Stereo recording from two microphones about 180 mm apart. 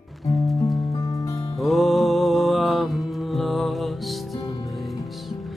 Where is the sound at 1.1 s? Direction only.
20° left (ahead or behind).